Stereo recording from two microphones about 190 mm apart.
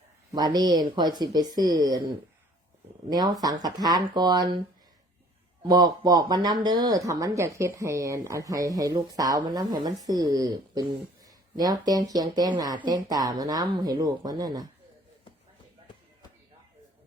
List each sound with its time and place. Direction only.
0.3 s speech: 20° right (ahead or behind)
3.1 s speech: 20° right (ahead or behind)
5.6 s speech: 20° right (ahead or behind)